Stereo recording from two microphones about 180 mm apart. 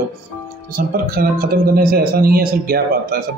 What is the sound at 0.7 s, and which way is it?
Speech, 55° right (ahead or behind).